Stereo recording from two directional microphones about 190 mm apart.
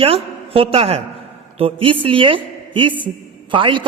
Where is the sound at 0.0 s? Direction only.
30° right (ahead or behind).